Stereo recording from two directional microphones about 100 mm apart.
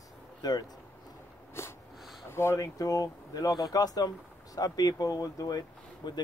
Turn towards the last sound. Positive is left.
turn(degrees=45)  # may be behind; listen again after turning